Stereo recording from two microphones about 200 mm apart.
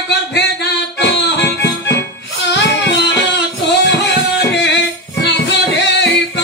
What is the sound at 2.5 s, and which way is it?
Music, 60° left (ahead or behind).